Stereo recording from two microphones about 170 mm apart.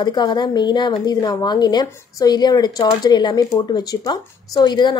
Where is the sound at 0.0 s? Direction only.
25° left (ahead or behind).